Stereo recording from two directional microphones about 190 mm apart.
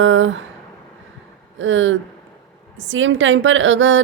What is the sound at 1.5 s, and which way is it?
A woman's voice, 85° right.